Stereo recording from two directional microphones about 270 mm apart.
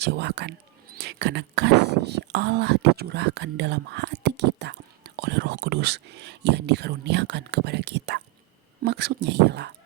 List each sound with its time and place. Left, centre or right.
0.0 s speech: right